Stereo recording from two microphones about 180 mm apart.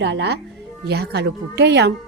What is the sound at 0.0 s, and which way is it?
A woman's voice, 70° right (ahead or behind).